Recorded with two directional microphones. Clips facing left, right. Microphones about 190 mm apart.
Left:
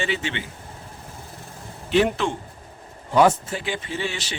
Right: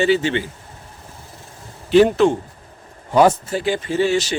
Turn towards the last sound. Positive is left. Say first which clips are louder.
# right 11 dB
turn(degrees=-40)  # may be behind; listen again after turning